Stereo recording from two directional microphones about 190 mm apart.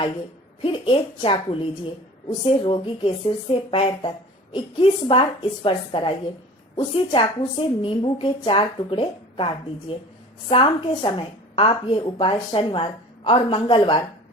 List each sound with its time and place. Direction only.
0.6 s a woman's voice: 30° left (ahead or behind)
10.5 s a woman's voice: 30° left (ahead or behind)